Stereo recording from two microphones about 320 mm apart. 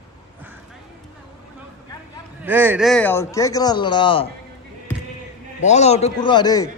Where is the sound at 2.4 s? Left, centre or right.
Centre.